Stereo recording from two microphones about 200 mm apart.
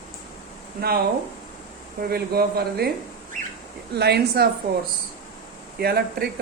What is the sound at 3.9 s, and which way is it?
Speech, 55° right (ahead or behind).